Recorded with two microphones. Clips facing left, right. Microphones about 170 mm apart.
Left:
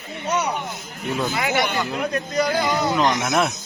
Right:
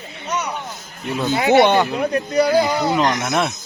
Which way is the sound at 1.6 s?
70° right (ahead or behind).